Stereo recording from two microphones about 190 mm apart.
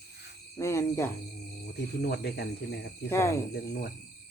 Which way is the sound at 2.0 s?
60° left (ahead or behind).